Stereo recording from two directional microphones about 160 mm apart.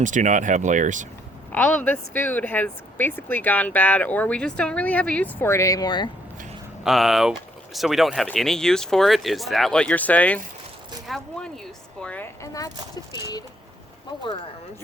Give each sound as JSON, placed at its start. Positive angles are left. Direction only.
{"t": 0.0, "sound": "speech", "side_deg": -50}
{"t": 1.5, "sound": "speech", "side_deg": 10}
{"t": 6.8, "sound": "speech", "side_deg": 0}